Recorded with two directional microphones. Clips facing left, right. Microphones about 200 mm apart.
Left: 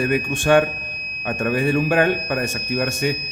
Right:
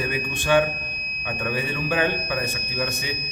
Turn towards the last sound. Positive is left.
turn(degrees=50)  # may be behind; listen again after turning